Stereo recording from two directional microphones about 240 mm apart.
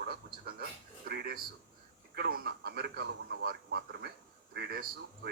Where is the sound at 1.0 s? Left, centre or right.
Right.